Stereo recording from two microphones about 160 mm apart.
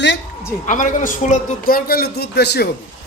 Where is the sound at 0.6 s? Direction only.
55° left (ahead or behind); by 2.7 s 90° left.